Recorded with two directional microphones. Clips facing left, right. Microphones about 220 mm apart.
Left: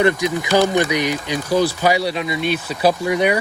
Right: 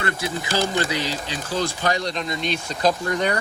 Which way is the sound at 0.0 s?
15° left (ahead or behind).